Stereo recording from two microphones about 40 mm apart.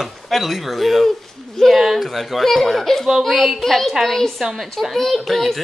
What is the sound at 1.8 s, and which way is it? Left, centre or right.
Speech, centre.